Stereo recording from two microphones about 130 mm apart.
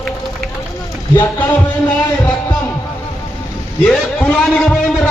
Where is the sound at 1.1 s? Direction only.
15° left (ahead or behind).